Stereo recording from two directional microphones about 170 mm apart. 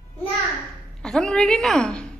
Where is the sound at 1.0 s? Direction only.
5° left (ahead or behind).